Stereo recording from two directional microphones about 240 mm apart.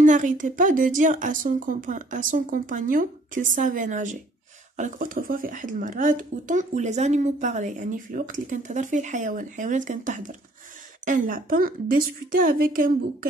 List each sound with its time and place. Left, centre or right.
0.0 s a child's voice: right